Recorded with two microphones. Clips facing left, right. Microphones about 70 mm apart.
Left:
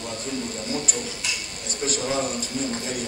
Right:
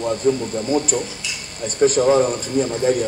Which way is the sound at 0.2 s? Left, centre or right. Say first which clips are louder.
Right 10 dB; right.